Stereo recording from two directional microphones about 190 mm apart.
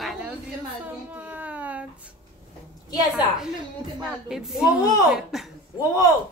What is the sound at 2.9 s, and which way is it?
Speech, 20° left (ahead or behind).